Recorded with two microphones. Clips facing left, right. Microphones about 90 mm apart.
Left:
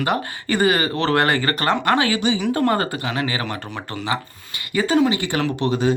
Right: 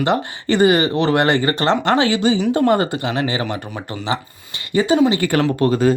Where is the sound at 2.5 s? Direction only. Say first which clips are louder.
Right 4 dB; 20° right (ahead or behind).